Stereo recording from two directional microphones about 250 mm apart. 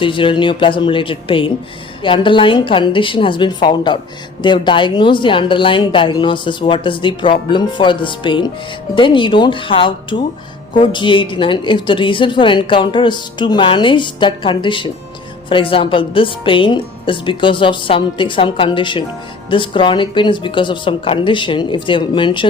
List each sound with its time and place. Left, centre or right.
0.0 s a woman's voice: centre